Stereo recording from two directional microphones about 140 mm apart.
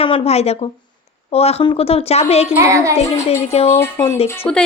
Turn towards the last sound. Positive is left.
turn(degrees=10)  # may be behind; listen again after turning